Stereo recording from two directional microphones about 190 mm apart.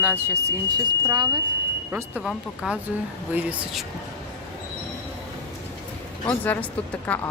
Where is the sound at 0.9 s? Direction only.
20° right (ahead or behind).